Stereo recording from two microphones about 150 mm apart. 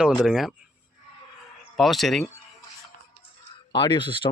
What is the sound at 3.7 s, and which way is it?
Speech, 30° left (ahead or behind).